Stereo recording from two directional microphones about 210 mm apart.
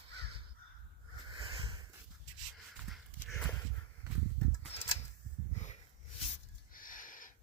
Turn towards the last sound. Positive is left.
turn(degrees=40)  # may be behind; listen again after turning